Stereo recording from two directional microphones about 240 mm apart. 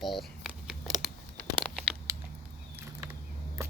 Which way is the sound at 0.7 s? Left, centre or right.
Centre.